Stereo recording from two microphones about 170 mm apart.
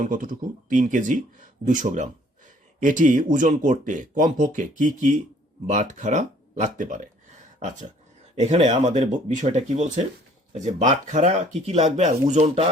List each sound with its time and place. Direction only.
0.0 s speech: 50° right (ahead or behind)
8.4 s speech: 45° right (ahead or behind)